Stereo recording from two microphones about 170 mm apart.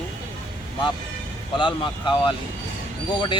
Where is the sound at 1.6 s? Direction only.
30° left (ahead or behind).